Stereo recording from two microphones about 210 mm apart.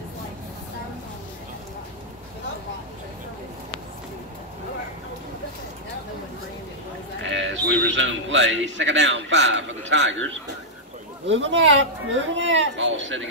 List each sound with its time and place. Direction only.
7.2 s sheep: 60° right (ahead or behind)
7.9 s a man's voice: 60° right (ahead or behind)
11.2 s a man's voice: 65° right (ahead or behind)